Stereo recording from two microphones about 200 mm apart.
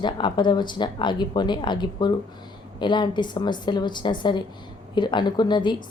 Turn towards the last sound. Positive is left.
turn(degrees=20)  # may be behind; listen again after turning